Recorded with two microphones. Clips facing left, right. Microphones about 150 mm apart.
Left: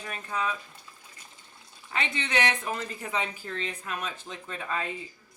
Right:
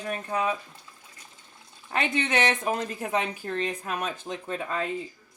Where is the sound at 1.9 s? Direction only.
50° right (ahead or behind).